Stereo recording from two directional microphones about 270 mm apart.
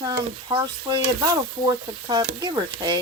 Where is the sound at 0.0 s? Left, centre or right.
Centre.